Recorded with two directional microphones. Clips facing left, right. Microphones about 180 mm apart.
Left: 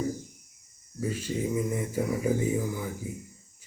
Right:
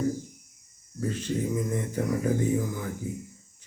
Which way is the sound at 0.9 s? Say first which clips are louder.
Right 1 dB; 10° left (ahead or behind).